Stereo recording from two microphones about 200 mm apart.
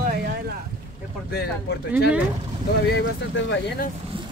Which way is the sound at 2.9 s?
70° left (ahead or behind).